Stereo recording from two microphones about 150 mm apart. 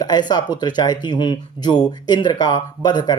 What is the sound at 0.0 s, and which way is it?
Speech, 30° left (ahead or behind).